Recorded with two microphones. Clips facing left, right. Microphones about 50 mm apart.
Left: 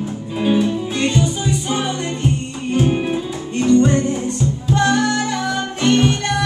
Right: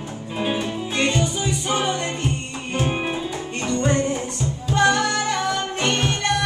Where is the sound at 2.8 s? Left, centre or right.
Right.